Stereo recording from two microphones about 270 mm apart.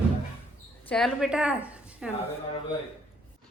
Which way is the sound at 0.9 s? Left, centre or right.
Centre.